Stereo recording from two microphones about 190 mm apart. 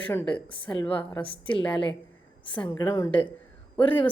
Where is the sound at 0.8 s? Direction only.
25° left (ahead or behind).